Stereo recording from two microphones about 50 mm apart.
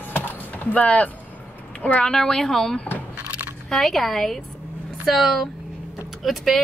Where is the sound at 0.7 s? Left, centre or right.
Left.